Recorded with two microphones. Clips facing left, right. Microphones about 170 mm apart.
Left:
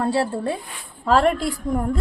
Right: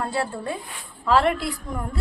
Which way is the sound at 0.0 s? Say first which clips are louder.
Left 5 dB; 35° left (ahead or behind).